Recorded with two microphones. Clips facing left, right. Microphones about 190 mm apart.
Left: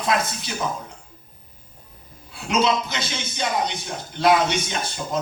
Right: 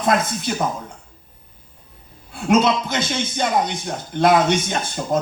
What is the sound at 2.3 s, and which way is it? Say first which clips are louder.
A man's voice: right 5 dB; 50° right (ahead or behind).